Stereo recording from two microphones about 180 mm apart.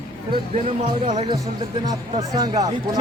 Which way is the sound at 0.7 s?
40° right (ahead or behind).